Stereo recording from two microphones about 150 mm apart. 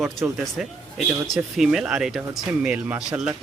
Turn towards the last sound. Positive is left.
turn(degrees=-10)  # may be behind; listen again after turning